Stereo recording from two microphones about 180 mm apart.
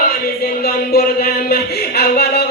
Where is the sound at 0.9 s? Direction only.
60° left (ahead or behind).